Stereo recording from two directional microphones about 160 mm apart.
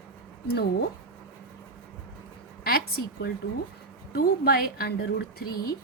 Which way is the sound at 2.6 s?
75° left (ahead or behind).